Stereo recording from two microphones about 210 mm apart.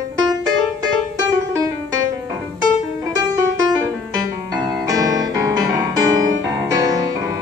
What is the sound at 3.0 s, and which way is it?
Music, 15° right (ahead or behind).